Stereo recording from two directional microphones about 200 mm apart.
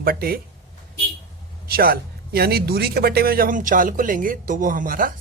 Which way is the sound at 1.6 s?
50° right (ahead or behind).